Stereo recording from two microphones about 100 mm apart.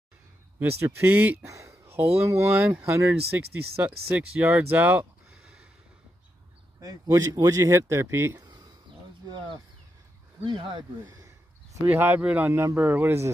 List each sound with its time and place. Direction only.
0.6 s speech: 25° right (ahead or behind)
1.5 s a sound: 30° right (ahead or behind)
2.2 s speech: 30° right (ahead or behind)
2.5 s speech: 10° right (ahead or behind)
2.8 s speech: 30° right (ahead or behind)
3.3 s speech: 15° right (ahead or behind)
5.3 s a sound: 5° right (ahead or behind)
6.8 s a man's voice: 35° right (ahead or behind)
10.4 s speech: 55° right (ahead or behind)
11.9 s speech: 20° right (ahead or behind)
12.5 s speech: 30° right (ahead or behind)